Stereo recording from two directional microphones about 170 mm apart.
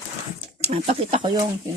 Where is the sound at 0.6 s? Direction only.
40° right (ahead or behind).